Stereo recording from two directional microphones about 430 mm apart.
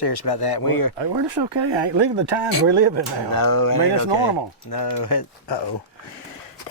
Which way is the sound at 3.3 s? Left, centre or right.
Left.